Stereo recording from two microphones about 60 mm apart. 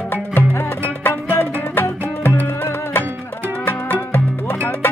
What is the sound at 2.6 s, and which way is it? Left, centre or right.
Music, left.